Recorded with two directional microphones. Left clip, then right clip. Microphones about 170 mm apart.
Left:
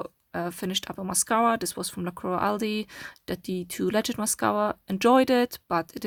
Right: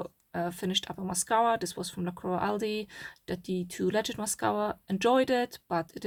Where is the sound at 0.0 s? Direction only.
35° left (ahead or behind).